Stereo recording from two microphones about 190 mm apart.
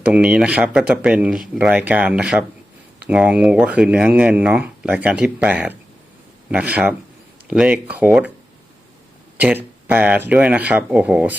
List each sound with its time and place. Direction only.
0.0 s speech: 5° right (ahead or behind)
9.4 s speech: 10° right (ahead or behind)